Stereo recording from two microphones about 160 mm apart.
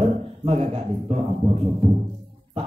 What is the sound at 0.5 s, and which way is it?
Speech, 40° right (ahead or behind).